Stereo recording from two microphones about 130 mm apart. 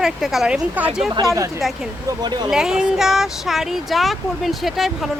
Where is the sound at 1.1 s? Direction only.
25° right (ahead or behind).